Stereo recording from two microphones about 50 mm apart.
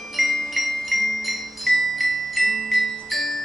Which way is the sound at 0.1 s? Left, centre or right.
Centre.